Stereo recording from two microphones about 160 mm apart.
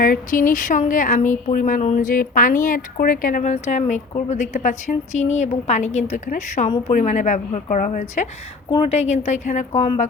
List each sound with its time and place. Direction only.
0.0 s a woman's voice: 60° left (ahead or behind)
6.7 s a woman's voice: 30° left (ahead or behind)
6.9 s a woman's voice: 50° left (ahead or behind)